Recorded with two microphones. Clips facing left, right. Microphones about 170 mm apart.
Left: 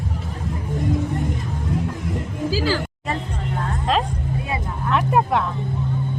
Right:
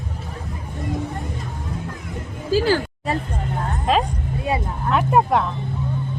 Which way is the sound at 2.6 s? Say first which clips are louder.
Right 8 dB; 45° right (ahead or behind).